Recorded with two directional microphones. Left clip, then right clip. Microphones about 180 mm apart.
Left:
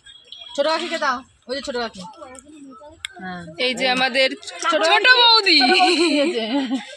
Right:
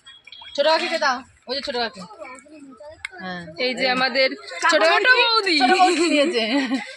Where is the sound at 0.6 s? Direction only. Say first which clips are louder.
Right 2 dB; 50° left (ahead or behind).